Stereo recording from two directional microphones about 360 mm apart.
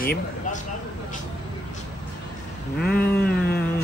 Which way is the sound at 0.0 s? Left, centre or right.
Left.